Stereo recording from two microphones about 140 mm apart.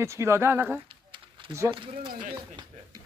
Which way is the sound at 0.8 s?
35° right (ahead or behind).